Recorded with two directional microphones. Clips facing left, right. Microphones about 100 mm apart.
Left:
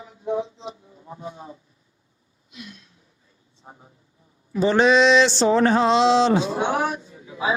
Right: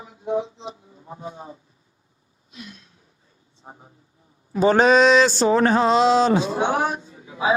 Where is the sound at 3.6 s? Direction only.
25° right (ahead or behind).